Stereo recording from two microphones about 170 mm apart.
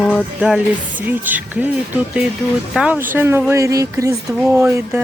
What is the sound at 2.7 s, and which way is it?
Speech, 5° right (ahead or behind).